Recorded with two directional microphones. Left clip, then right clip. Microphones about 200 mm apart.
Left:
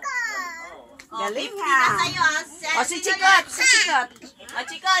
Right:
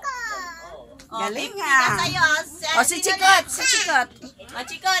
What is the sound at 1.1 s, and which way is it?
A child's voice, 15° right (ahead or behind).